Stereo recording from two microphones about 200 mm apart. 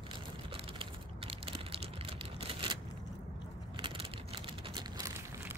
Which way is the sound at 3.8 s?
25° right (ahead or behind).